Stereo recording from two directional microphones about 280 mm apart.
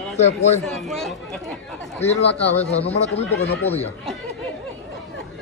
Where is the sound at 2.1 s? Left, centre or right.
Left.